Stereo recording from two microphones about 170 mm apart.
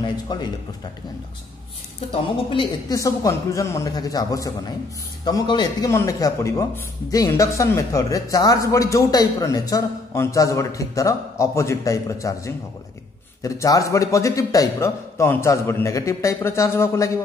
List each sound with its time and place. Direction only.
0.3 s speech: 25° left (ahead or behind)
2.5 s a man's voice: 25° left (ahead or behind)